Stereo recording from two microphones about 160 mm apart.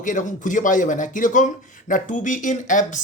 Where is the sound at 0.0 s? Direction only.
55° left (ahead or behind).